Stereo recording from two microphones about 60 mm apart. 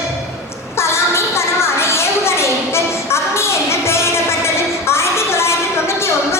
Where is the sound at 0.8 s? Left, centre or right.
Left.